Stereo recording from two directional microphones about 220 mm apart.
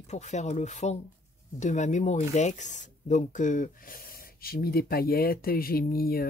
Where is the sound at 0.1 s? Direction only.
30° left (ahead or behind).